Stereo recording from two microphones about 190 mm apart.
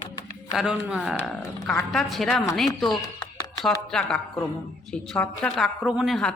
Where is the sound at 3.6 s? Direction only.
Centre (ahead or behind).